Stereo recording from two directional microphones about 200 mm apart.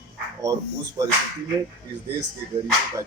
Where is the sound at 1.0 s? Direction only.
30° right (ahead or behind).